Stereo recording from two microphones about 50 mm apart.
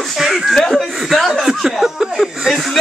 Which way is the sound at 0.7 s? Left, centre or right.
Centre.